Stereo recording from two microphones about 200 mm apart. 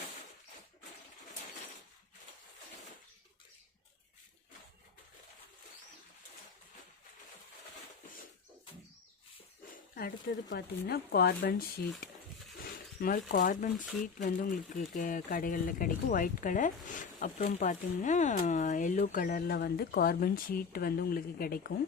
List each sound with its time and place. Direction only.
10.5 s speech: 50° left (ahead or behind)